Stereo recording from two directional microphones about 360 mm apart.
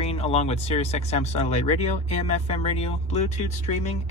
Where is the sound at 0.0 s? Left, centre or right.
Centre.